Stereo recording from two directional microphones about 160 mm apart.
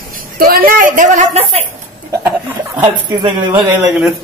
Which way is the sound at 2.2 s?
10° right (ahead or behind).